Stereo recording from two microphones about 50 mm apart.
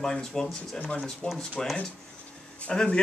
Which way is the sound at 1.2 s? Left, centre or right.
Left.